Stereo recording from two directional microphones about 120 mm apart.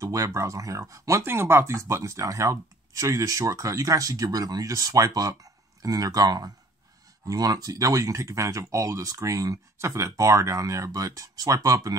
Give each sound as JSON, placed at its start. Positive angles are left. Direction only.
{"t": 0.0, "sound": "speech", "side_deg": -25}